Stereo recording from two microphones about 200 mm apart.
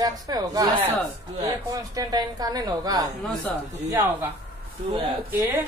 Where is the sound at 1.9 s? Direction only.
20° right (ahead or behind).